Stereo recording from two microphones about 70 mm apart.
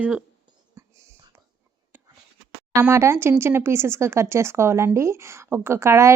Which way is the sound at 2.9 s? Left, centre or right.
Right.